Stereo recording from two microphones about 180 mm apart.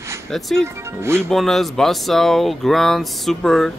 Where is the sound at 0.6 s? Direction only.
15° right (ahead or behind).